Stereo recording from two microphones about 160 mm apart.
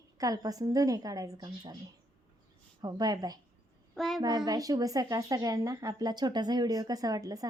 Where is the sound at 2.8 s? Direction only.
25° right (ahead or behind).